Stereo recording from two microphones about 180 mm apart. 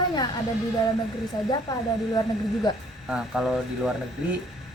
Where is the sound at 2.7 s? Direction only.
20° left (ahead or behind).